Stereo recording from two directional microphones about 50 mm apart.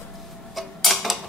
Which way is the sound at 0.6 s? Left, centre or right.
Centre.